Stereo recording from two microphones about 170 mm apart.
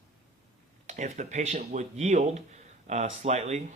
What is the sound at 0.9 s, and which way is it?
Speech, 45° right (ahead or behind).